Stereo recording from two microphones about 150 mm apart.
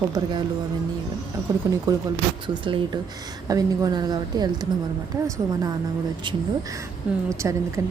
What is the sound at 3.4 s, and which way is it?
A woman's voice, 25° right (ahead or behind).